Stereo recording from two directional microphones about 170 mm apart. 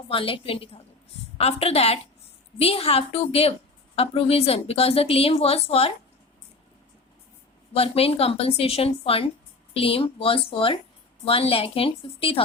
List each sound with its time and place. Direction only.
0.1 s a woman's voice: 30° left (ahead or behind)
7.7 s a woman's voice: 35° left (ahead or behind)